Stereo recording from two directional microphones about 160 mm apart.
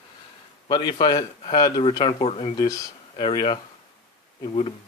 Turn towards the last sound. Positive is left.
turn(degrees=35)  # may be behind; listen again after turning